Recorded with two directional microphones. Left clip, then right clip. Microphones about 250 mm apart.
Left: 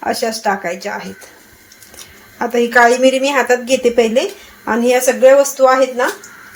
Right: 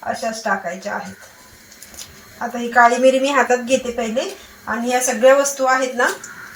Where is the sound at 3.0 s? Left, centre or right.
Left.